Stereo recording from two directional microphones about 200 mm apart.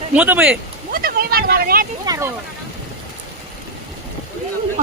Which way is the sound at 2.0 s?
15° right (ahead or behind).